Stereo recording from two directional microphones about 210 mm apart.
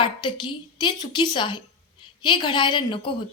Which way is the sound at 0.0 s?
25° left (ahead or behind).